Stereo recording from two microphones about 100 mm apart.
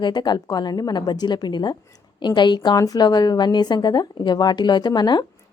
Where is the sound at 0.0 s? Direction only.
45° left (ahead or behind).